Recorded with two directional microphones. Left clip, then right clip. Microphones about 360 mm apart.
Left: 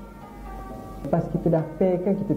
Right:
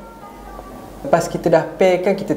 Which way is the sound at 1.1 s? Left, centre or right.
Centre.